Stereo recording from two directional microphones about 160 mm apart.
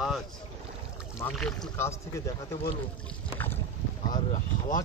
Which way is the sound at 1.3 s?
5° left (ahead or behind).